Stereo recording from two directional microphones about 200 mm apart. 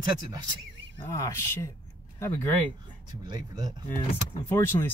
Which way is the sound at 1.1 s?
15° left (ahead or behind).